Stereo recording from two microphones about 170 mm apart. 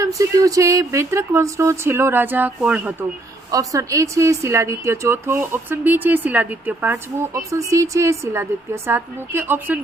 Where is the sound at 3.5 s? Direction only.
20° right (ahead or behind).